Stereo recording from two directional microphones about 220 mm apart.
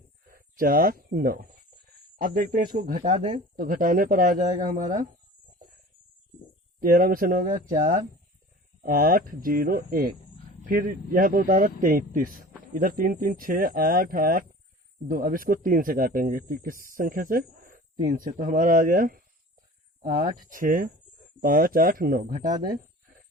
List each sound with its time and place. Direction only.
0.3 s speech: 40° right (ahead or behind)
3.5 s speech: 40° right (ahead or behind)
6.7 s speech: 40° right (ahead or behind)
22.6 s a sound: 40° right (ahead or behind)